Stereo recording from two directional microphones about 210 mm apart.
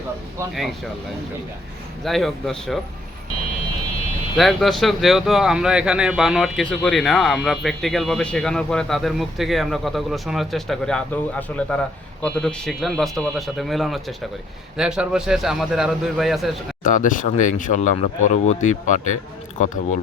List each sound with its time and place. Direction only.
2.0 s speech: centre (ahead or behind)
4.4 s speech: centre (ahead or behind)
16.8 s speech: 40° left (ahead or behind)